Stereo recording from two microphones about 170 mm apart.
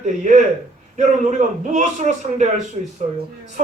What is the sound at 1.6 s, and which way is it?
Speech, 45° right (ahead or behind).